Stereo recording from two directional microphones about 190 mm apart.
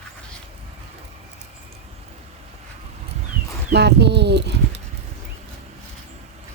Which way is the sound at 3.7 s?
60° right (ahead or behind).